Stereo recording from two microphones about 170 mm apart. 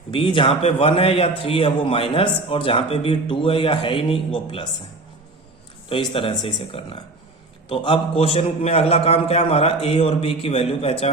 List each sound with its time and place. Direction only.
0.1 s a man's voice: 30° left (ahead or behind)
5.9 s a man's voice: 30° left (ahead or behind)